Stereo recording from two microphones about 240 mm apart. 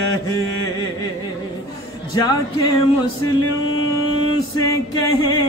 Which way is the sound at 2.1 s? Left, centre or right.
Centre.